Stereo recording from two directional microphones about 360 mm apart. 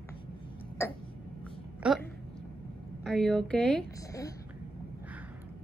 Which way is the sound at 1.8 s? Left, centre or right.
Centre.